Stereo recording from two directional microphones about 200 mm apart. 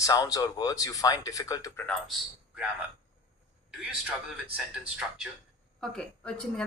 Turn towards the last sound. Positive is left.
turn(degrees=5)  # may be behind; listen again after turning